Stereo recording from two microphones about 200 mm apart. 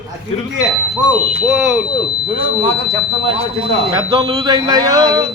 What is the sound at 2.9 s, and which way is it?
Speech, 30° right (ahead or behind).